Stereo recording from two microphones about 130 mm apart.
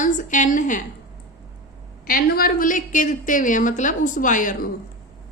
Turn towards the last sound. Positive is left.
turn(degrees=85)